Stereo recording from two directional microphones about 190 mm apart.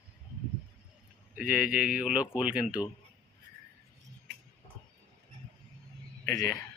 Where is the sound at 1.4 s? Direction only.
5° right (ahead or behind).